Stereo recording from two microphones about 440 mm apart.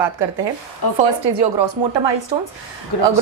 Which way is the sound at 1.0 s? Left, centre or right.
Right.